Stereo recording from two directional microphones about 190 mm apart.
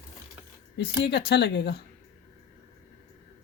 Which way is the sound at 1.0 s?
60° left (ahead or behind).